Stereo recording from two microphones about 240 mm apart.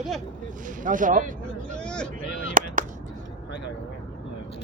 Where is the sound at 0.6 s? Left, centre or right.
Right.